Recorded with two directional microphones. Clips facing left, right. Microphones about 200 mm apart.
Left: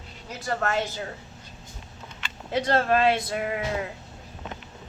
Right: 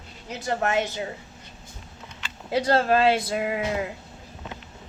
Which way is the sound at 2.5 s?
30° right (ahead or behind).